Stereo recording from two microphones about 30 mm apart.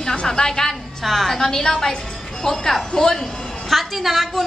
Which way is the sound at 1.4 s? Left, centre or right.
Centre.